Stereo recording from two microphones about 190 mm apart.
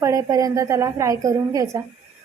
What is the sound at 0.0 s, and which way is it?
A woman's voice, 15° right (ahead or behind).